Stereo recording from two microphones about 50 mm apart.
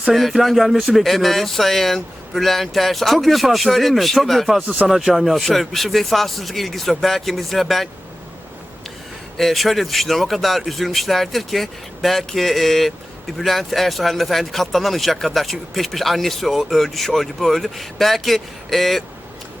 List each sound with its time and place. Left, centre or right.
0.1 s speech: centre
4.6 s speech: right
4.9 s speech: centre
9.4 s speech: centre